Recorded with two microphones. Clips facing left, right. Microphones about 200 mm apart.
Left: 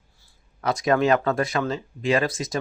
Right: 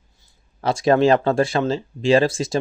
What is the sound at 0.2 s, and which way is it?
Speech, 25° right (ahead or behind).